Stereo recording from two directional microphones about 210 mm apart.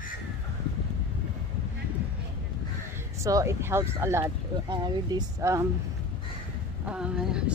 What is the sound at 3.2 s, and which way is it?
Speech, 15° right (ahead or behind).